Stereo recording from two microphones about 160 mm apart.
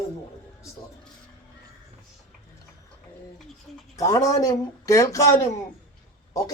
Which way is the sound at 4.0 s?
20° left (ahead or behind).